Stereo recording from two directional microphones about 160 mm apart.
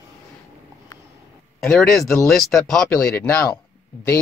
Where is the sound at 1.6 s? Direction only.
5° left (ahead or behind).